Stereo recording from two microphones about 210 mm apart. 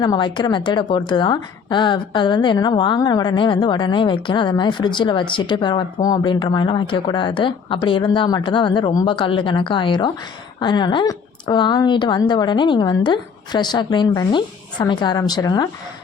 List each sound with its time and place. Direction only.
0.0 s a woman's voice: 20° left (ahead or behind)